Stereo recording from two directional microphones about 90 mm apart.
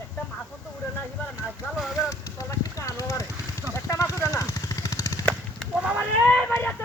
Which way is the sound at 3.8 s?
35° left (ahead or behind).